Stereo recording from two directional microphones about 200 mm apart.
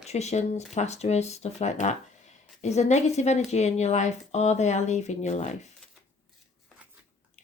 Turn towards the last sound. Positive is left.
turn(degrees=35)  # may be behind; listen again after turning